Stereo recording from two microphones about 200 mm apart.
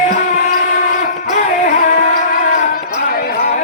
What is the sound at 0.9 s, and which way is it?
Music, 45° left (ahead or behind).